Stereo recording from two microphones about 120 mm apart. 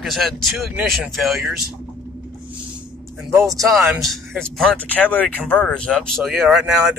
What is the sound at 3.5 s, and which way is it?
Speech, centre (ahead or behind).